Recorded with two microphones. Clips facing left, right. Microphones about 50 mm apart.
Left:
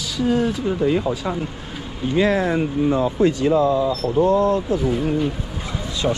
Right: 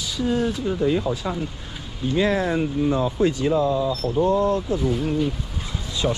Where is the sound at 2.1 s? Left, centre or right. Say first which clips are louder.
Left 3 dB; left.